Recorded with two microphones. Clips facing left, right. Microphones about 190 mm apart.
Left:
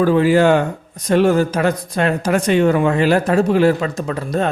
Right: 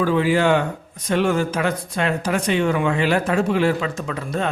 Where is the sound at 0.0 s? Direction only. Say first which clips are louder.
Left 5 dB; 45° left (ahead or behind).